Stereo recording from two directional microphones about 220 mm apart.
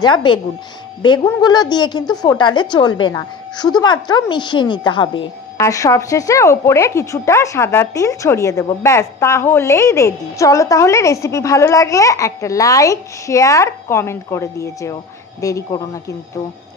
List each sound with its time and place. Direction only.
0.0 s a woman's voice: 20° left (ahead or behind)